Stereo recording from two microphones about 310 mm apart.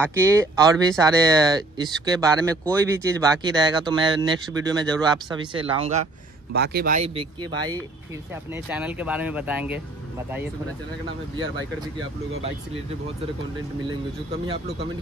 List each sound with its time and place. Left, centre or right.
0.2 s speech: centre
6.5 s speech: right
8.5 s speech: centre
11.3 s speech: right